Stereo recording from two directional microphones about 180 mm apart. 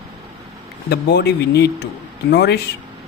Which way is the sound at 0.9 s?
65° left (ahead or behind).